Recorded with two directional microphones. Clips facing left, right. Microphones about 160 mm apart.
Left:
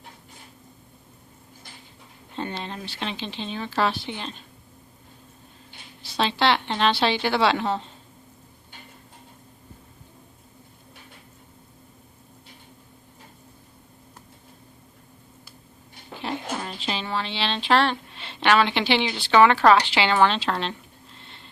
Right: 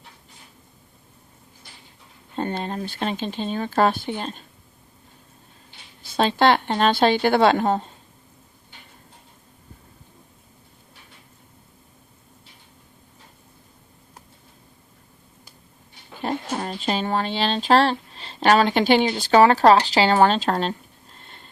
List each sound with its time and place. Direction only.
2.3 s speech: 45° right (ahead or behind)
6.0 s speech: 50° right (ahead or behind)
16.1 s speech: 45° right (ahead or behind)